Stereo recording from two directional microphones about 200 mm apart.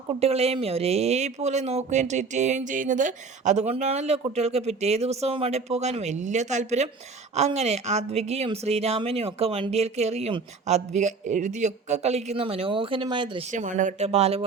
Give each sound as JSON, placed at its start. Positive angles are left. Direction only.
{"t": 0.1, "sound": "speech", "side_deg": -30}
{"t": 13.5, "sound": "speech", "side_deg": -40}